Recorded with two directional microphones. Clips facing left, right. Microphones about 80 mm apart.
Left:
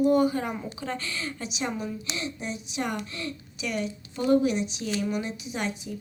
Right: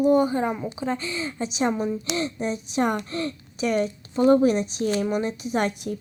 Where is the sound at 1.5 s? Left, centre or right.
Right.